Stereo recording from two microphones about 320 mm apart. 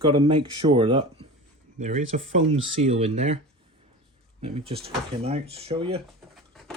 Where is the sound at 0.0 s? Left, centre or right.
Centre.